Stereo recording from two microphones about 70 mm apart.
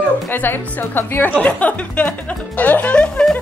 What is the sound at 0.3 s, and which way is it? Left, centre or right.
A woman's voice, left.